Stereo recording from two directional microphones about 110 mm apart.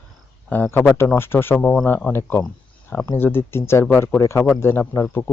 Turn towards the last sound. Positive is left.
turn(degrees=20)  # may be behind; listen again after turning